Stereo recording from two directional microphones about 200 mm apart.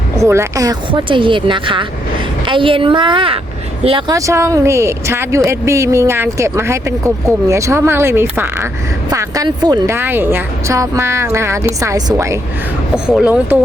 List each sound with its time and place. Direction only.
0.2 s speech: 15° right (ahead or behind)
4.3 s a woman's voice: 15° right (ahead or behind)